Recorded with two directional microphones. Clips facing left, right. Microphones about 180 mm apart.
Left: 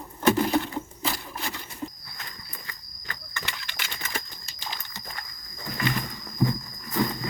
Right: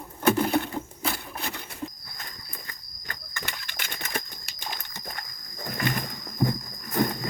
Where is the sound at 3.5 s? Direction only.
50° right (ahead or behind).